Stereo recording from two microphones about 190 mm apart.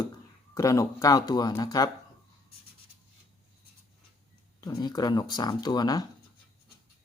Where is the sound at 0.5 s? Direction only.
15° left (ahead or behind).